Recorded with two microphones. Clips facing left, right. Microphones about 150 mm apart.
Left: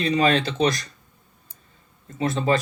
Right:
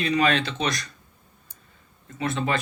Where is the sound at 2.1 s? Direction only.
30° left (ahead or behind).